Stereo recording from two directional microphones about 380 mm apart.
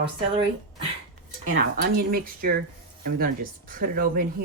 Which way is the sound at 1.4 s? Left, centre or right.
Right.